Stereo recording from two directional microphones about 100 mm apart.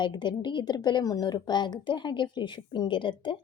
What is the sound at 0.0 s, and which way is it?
A woman's voice, 50° left (ahead or behind).